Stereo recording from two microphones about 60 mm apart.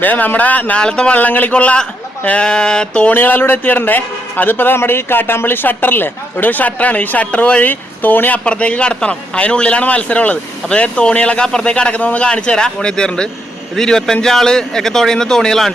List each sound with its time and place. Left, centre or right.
0.0 s a man's voice: left
0.8 s speech: centre
1.1 s a man's voice: left
3.1 s a man's voice: left
8.4 s a man's voice: centre